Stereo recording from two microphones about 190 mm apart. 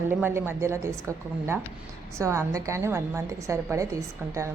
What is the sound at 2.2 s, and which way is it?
A woman's voice, 15° right (ahead or behind).